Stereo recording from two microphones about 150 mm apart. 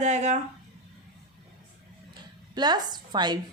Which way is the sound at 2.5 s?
30° right (ahead or behind).